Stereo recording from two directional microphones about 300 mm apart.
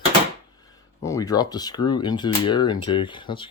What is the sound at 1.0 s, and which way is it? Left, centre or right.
Speech, centre.